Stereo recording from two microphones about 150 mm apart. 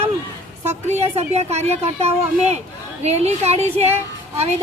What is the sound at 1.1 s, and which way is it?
Speech, 45° right (ahead or behind).